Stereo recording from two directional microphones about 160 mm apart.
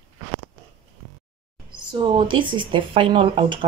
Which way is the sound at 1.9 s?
30° right (ahead or behind).